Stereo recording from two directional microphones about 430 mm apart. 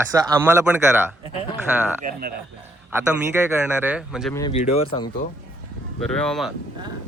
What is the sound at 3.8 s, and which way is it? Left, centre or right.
Speech, centre.